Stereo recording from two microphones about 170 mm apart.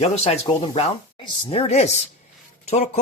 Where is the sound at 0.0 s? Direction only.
40° left (ahead or behind).